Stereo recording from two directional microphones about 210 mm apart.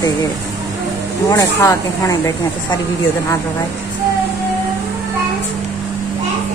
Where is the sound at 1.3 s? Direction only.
15° left (ahead or behind).